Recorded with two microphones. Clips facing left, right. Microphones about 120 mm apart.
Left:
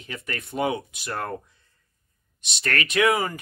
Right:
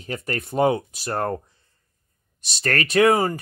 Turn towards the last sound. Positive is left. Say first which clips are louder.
# right 5 dB
turn(degrees=-30)  # may be behind; listen again after turning